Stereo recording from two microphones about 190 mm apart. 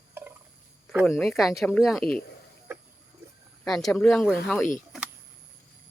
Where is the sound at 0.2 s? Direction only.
10° right (ahead or behind).